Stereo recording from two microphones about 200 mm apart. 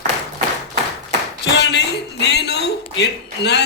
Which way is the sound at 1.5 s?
60° left (ahead or behind).